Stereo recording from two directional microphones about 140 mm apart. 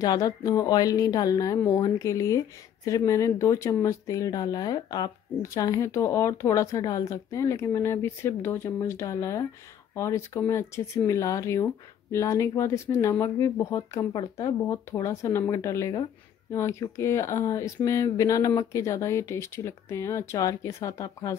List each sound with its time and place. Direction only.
0.0 s speech: 25° left (ahead or behind)